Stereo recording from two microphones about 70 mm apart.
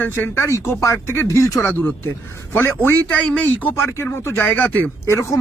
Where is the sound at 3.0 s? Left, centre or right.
Centre.